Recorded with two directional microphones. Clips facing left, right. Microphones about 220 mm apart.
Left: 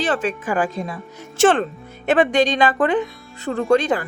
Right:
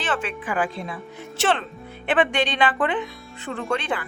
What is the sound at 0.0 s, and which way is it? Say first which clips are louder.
Speech: left 6 dB; 40° left (ahead or behind).